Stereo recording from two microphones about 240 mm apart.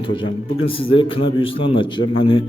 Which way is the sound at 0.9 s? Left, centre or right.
Left.